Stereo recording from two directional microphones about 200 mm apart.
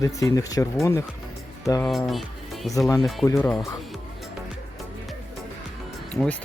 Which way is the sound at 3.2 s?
15° left (ahead or behind).